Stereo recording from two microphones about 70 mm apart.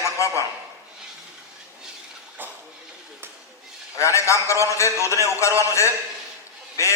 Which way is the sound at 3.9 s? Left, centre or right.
Left.